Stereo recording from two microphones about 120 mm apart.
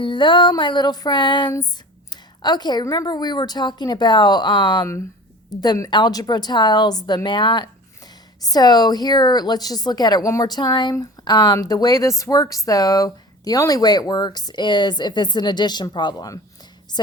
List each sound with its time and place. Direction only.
0.0 s a woman's voice: 40° left (ahead or behind)
2.0 s a sound: 35° left (ahead or behind)
2.8 s a woman's voice: 30° left (ahead or behind)